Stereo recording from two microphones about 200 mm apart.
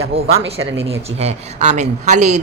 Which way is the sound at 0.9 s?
35° right (ahead or behind).